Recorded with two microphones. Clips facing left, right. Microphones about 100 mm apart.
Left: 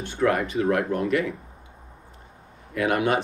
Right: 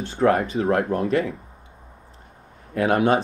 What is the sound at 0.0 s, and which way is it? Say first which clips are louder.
Speech: right 3 dB; 30° right (ahead or behind).